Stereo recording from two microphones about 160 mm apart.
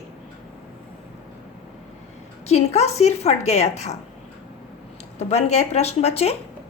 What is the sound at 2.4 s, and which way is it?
A woman's voice, 40° left (ahead or behind).